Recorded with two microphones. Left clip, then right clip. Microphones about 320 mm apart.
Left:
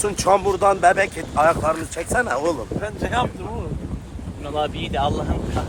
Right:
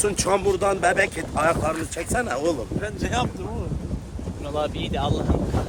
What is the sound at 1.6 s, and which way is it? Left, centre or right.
Speech, centre.